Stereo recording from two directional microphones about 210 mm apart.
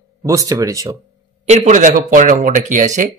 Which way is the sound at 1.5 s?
35° right (ahead or behind).